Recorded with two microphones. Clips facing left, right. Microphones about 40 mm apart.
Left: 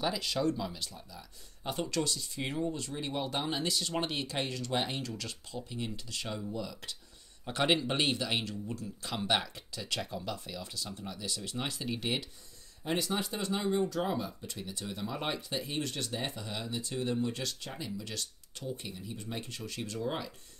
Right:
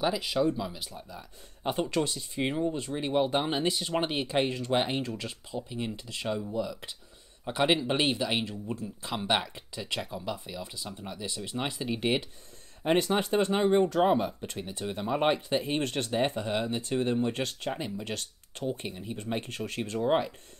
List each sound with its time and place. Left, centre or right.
0.0 s speech: centre
1.1 s speech: right
12.0 s speech: right